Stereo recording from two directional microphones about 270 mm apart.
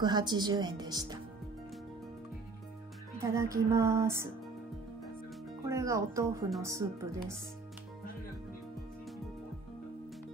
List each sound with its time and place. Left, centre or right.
0.0 s a woman's voice: centre
3.2 s a woman's voice: centre
5.7 s a woman's voice: centre